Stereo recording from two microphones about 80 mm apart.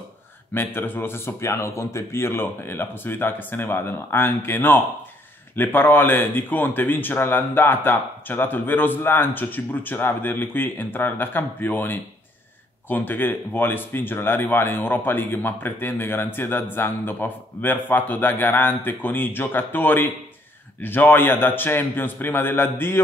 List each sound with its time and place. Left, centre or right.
0.6 s speech: left